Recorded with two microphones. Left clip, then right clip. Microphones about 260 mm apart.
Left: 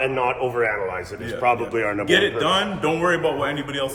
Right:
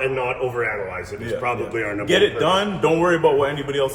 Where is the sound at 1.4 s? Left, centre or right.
Centre.